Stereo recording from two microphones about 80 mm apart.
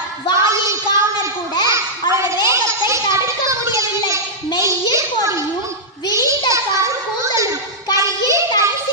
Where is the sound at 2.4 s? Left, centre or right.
Right.